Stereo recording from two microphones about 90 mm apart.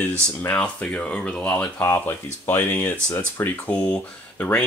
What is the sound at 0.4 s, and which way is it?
Speech, 20° left (ahead or behind).